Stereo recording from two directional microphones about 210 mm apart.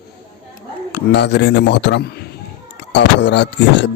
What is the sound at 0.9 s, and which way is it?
Speech, 55° left (ahead or behind).